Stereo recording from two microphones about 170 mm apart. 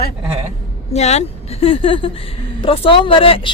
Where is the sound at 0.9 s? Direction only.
40° left (ahead or behind).